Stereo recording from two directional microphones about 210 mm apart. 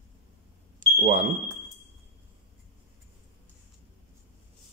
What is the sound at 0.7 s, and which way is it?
Smoke detector, 35° right (ahead or behind).